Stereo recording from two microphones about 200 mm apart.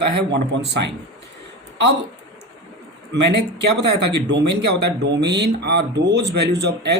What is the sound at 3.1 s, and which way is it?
Speech, 60° right (ahead or behind).